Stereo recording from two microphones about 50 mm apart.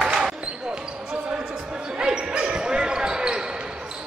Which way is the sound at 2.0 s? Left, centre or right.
Centre.